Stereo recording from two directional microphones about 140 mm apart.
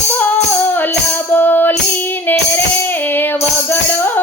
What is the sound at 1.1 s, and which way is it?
Music, 15° left (ahead or behind).